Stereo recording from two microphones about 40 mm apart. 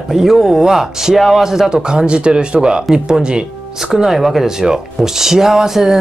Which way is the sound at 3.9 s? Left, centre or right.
Centre.